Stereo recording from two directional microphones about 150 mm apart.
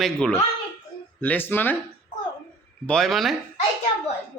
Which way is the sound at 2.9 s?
5° left (ahead or behind).